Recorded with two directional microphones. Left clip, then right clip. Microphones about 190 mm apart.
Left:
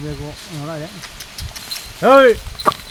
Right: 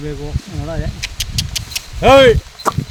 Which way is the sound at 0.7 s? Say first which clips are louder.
Right 5 dB; 40° right (ahead or behind).